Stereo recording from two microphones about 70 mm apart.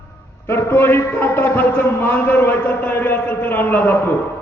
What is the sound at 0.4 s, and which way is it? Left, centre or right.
A man's voice, left.